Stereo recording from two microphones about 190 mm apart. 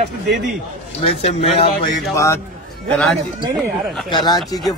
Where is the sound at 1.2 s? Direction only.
35° left (ahead or behind).